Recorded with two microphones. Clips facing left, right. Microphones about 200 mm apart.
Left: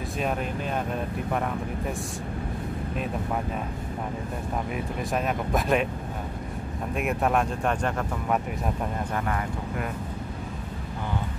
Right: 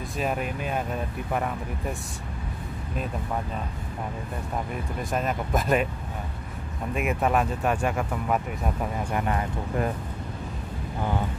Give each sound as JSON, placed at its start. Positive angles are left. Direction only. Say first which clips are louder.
{"t": 0.2, "sound": "speech", "louder": "right 1 dB", "side_deg": -5}
{"t": 4.7, "sound": "speech", "louder": "even", "side_deg": 0}
{"t": 6.9, "sound": "speech", "louder": "right 1 dB", "side_deg": 0}
{"t": 9.1, "sound": "speech", "louder": "right 4 dB", "side_deg": -20}